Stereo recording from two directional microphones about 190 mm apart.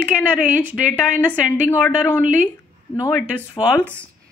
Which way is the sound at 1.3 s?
10° left (ahead or behind).